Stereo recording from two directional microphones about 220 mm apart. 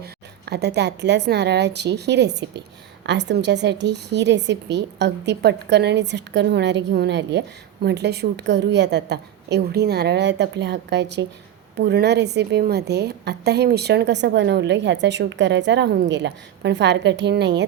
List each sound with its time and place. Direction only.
0.0 s a woman's voice: 45° right (ahead or behind)